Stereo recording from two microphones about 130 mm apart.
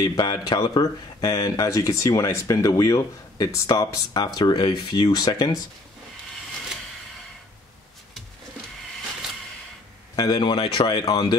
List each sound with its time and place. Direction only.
0.0 s speech: 30° left (ahead or behind)
10.1 s speech: 30° left (ahead or behind)